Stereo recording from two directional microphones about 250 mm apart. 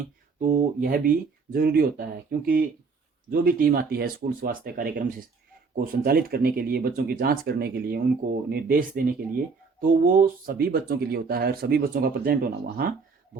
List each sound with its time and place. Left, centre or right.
0.0 s speech: right
3.2 s speech: right